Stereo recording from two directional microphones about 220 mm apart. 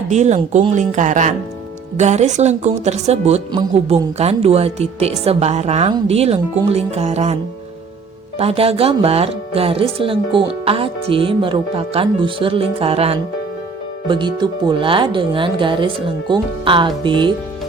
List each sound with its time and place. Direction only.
0.1 s speech: 30° right (ahead or behind)
8.4 s speech: 25° right (ahead or behind)